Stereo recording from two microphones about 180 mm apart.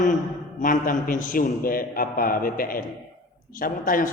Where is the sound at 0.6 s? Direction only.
50° left (ahead or behind).